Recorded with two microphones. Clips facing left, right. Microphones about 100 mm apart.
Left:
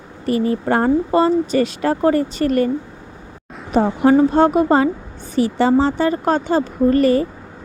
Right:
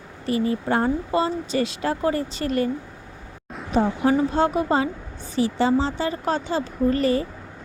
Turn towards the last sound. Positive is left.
turn(degrees=55)  # may be behind; listen again after turning